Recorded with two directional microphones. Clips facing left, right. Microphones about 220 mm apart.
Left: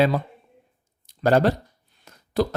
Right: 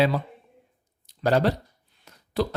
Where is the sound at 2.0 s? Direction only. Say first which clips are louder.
Left 3 dB; 45° left (ahead or behind).